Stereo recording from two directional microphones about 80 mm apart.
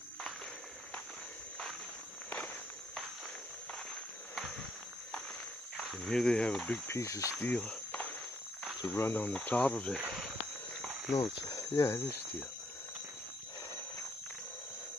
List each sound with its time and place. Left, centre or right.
2.2 s walk: centre
6.0 s speech: centre
6.9 s speech: left
7.3 s speech: centre
8.8 s speech: left
11.1 s speech: left